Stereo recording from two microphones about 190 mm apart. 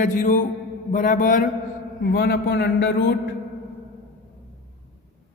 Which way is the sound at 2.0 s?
55° left (ahead or behind).